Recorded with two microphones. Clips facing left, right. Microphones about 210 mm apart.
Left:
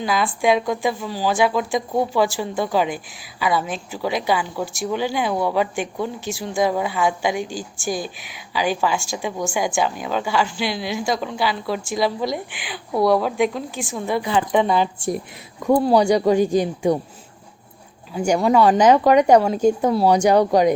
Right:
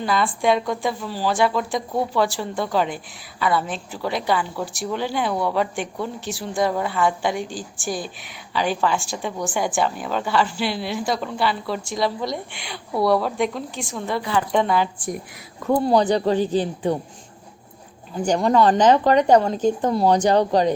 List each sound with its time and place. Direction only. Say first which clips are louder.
0.0 s a woman's voice: left 1 dB; centre (ahead or behind)
14.1 s a woman's voice: left 2 dB; 15° left (ahead or behind)
15.8 s speech: left 1 dB; 10° left (ahead or behind)
18.1 s speech: left 2 dB; 5° left (ahead or behind)